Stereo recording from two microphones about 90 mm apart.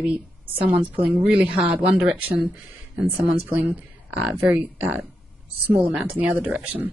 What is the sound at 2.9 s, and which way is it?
Speech, 20° right (ahead or behind).